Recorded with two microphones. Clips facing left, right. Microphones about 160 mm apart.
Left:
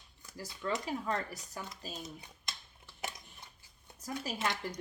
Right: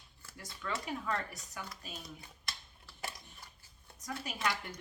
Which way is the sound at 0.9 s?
30° left (ahead or behind).